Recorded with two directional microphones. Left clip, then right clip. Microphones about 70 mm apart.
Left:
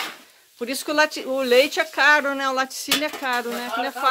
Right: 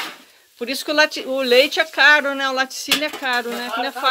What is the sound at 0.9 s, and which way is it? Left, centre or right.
Speech, left.